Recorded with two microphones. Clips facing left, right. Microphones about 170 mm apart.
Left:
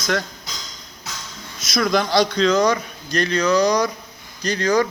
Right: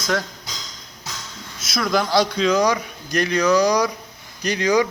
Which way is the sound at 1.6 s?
Centre (ahead or behind).